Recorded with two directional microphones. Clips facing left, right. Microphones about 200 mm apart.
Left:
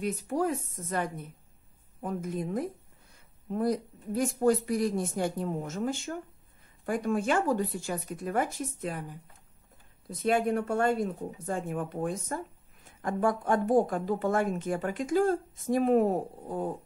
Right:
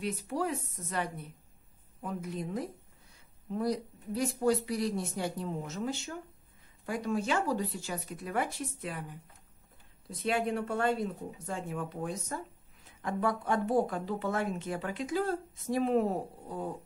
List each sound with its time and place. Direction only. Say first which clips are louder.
0.0 s speech: left 4 dB; 45° left (ahead or behind)
10.2 s speech: left 4 dB; 50° left (ahead or behind)